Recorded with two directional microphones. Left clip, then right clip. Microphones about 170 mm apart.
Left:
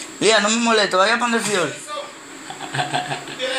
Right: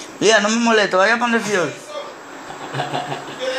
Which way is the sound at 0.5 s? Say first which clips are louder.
Right 1 dB; 15° right (ahead or behind).